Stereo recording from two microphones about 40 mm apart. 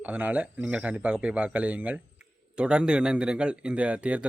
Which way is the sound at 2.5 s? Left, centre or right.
Right.